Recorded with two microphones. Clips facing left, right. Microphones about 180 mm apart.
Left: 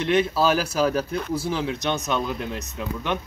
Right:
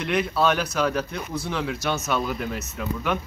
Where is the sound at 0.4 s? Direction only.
5° left (ahead or behind).